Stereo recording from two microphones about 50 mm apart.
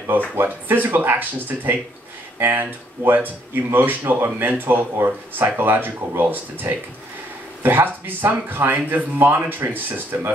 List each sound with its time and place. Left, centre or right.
0.4 s speech: right